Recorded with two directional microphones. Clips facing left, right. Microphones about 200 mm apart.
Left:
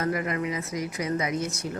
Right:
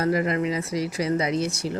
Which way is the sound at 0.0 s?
30° right (ahead or behind).